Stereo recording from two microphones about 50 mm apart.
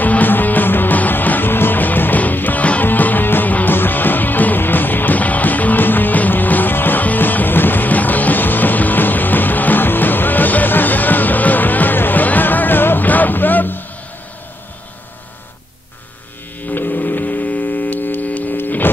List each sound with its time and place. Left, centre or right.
0.0 s music: left
16.6 s hum: left